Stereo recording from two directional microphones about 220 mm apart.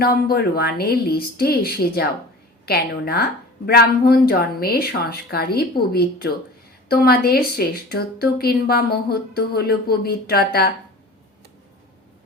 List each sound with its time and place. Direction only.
0.0 s a woman's voice: 45° left (ahead or behind)